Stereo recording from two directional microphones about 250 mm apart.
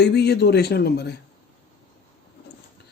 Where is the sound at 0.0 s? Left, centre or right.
Left.